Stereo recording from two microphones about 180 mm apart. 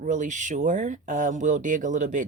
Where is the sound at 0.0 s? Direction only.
45° right (ahead or behind).